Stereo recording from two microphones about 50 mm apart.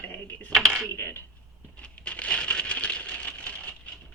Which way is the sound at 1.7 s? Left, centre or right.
Left.